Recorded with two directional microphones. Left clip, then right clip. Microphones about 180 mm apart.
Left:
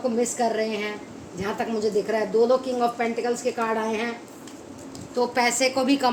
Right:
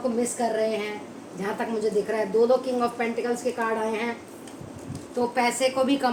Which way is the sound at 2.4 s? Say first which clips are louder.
Even; 30° left (ahead or behind).